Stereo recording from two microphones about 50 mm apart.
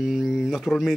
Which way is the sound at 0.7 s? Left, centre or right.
Left.